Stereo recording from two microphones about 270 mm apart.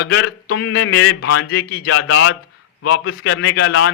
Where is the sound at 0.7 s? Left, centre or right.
Left.